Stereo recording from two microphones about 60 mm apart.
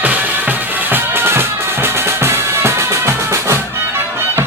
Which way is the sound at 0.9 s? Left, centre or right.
Right.